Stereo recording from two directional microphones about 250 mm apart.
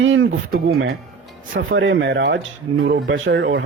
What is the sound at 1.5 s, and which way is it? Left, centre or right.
Speech, right.